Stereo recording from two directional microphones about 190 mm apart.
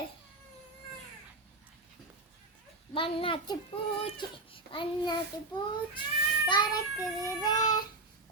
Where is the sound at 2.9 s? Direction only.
30° left (ahead or behind).